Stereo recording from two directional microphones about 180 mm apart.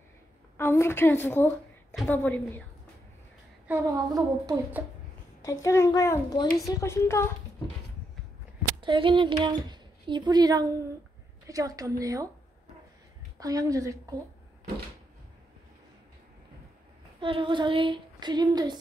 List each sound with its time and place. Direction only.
0.6 s a woman's voice: 15° left (ahead or behind)
3.6 s speech: 15° right (ahead or behind)
5.4 s a child's voice: 15° left (ahead or behind)
8.8 s speech: 25° right (ahead or behind)
13.4 s speech: 20° right (ahead or behind)
17.2 s speech: 30° right (ahead or behind)